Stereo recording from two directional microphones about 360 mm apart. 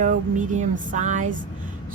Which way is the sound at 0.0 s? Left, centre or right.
Right.